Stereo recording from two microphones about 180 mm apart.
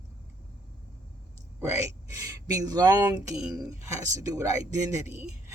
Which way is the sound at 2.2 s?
20° right (ahead or behind).